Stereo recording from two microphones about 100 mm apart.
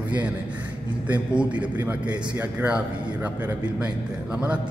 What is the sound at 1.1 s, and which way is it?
A man's voice, 15° right (ahead or behind).